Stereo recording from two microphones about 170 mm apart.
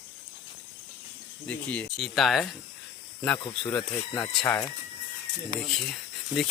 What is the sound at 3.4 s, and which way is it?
Speech, 20° left (ahead or behind).